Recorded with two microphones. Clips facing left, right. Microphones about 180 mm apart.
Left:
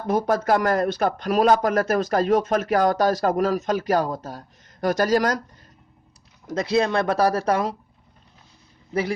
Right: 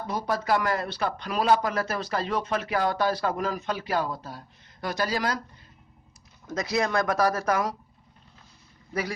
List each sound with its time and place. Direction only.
0.1 s speech: 50° left (ahead or behind)
6.5 s speech: 30° left (ahead or behind)
8.9 s speech: 25° left (ahead or behind)